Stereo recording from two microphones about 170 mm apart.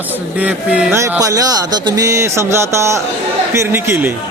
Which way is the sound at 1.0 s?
20° right (ahead or behind).